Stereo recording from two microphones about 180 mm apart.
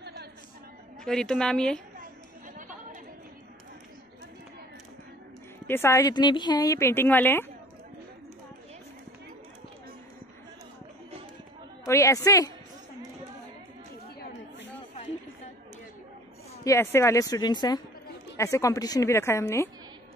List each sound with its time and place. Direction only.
0.0 s a sound: 65° right (ahead or behind)
1.0 s speech: 5° left (ahead or behind)
5.7 s speech: 15° left (ahead or behind)
11.8 s a woman's voice: 15° left (ahead or behind)
16.6 s speech: 15° left (ahead or behind)